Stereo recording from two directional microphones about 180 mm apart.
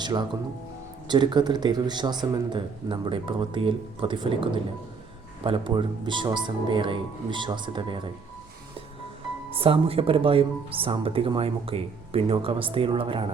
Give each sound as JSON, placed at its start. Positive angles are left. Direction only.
{"t": 0.0, "sound": "speech", "side_deg": -25}
{"t": 9.5, "sound": "speech", "side_deg": -30}